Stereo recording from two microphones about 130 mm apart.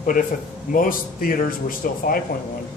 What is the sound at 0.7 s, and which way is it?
Speech, 90° left.